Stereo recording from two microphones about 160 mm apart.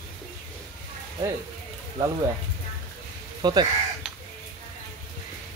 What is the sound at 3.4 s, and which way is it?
Speech, 25° right (ahead or behind).